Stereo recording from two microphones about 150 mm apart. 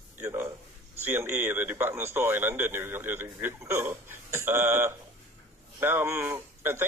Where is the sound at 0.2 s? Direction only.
15° right (ahead or behind).